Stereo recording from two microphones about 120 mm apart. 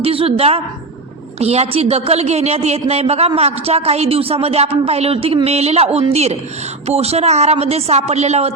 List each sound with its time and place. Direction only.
0.0 s a woman's voice: 50° right (ahead or behind)